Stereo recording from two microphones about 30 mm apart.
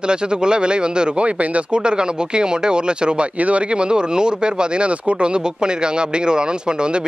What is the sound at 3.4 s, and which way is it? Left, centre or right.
Speech, right.